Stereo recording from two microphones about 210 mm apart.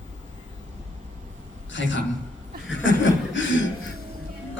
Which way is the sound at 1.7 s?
60° left (ahead or behind).